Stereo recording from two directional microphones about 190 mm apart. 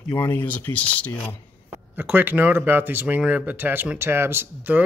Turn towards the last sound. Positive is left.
turn(degrees=-10)  # may be behind; listen again after turning